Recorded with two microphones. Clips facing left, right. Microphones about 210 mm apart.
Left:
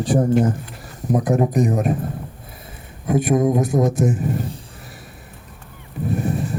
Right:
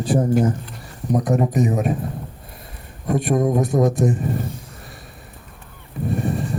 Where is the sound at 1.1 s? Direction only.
Centre (ahead or behind).